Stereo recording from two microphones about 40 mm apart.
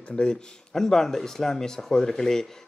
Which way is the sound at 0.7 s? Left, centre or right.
Centre.